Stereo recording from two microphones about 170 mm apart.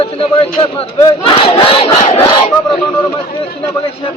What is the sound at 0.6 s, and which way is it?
Battle cry, 30° left (ahead or behind).